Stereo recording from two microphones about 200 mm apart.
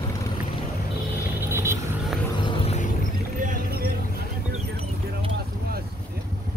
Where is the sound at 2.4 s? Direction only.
25° left (ahead or behind).